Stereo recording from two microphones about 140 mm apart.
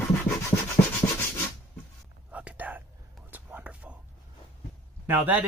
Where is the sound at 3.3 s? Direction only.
10° right (ahead or behind).